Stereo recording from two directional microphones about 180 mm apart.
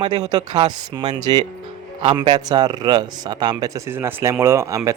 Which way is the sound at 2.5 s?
20° right (ahead or behind).